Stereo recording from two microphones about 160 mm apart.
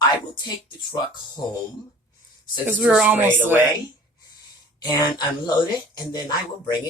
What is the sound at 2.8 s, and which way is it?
Speech, 10° right (ahead or behind).